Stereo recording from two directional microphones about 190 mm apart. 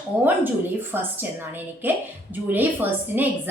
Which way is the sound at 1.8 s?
10° right (ahead or behind).